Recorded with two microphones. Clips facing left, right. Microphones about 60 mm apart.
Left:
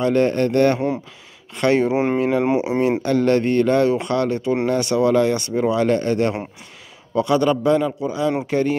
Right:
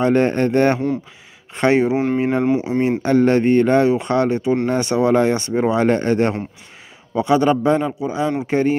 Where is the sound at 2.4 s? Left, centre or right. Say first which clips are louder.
Right 1 dB; centre.